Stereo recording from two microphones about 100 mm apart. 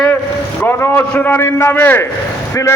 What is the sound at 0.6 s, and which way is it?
A man's voice, 20° left (ahead or behind).